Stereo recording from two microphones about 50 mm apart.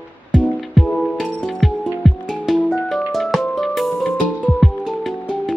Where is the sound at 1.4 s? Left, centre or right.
Centre.